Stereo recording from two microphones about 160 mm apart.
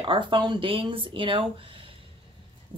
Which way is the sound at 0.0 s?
30° right (ahead or behind).